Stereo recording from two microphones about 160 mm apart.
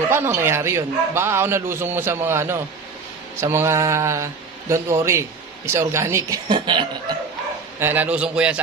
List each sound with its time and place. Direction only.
0.1 s a man's voice: 15° right (ahead or behind)
6.5 s chuckle: 30° right (ahead or behind)
7.8 s a man's voice: 10° right (ahead or behind)